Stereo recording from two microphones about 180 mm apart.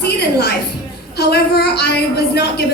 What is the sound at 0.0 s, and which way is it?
Music, 65° left (ahead or behind).